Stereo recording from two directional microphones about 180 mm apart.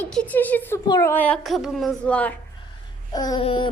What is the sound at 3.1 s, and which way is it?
Babbling, 20° left (ahead or behind).